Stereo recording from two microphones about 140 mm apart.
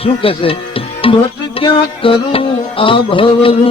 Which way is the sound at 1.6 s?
40° left (ahead or behind).